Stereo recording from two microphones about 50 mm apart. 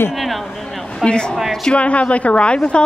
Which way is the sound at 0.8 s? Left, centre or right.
Centre.